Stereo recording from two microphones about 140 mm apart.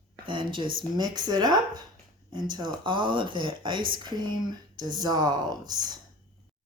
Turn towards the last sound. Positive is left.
turn(degrees=-30)  # may be behind; listen again after turning